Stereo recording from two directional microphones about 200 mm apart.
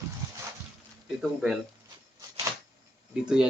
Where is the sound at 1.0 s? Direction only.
Centre (ahead or behind).